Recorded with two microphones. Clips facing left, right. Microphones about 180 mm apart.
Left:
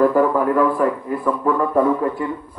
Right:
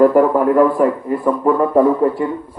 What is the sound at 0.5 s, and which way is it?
Speech, 10° right (ahead or behind).